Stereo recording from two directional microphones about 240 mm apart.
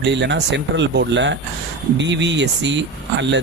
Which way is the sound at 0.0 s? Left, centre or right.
Right.